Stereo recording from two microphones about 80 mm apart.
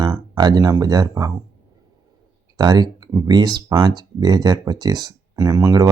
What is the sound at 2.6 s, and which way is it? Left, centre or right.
Speech, right.